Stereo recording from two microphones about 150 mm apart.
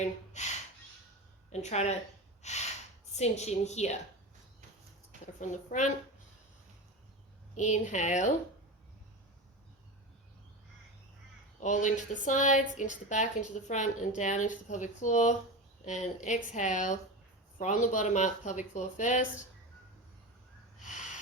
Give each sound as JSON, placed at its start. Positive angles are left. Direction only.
{"t": 0.0, "sound": "speech", "side_deg": 50}
{"t": 1.7, "sound": "speech", "side_deg": 50}
{"t": 2.4, "sound": "gasp", "side_deg": 50}
{"t": 3.2, "sound": "speech", "side_deg": 45}
{"t": 5.4, "sound": "a woman's voice", "side_deg": 55}
{"t": 7.5, "sound": "speech", "side_deg": 55}
{"t": 11.6, "sound": "a woman's voice", "side_deg": 55}
{"t": 20.7, "sound": "snort", "side_deg": 55}